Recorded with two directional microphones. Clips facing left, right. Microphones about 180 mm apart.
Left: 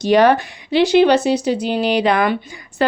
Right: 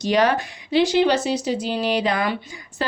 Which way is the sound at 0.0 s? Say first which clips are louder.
Left 6 dB; 60° left (ahead or behind).